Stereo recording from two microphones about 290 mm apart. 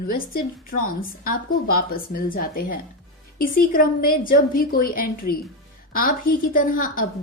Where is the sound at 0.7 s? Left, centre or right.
Left.